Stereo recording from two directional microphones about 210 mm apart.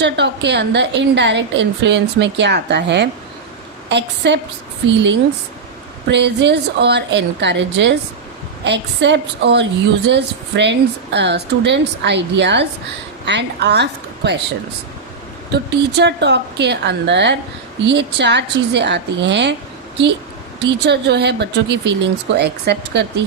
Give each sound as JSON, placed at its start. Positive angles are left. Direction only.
{"t": 0.0, "sound": "a woman's voice", "side_deg": -55}
{"t": 6.1, "sound": "a woman's voice", "side_deg": -55}
{"t": 15.5, "sound": "a woman's voice", "side_deg": -55}
{"t": 20.6, "sound": "speech", "side_deg": -55}